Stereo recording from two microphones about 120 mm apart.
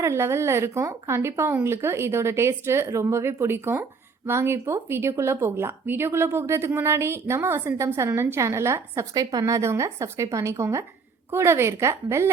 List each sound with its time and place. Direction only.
0.0 s speech: 20° right (ahead or behind)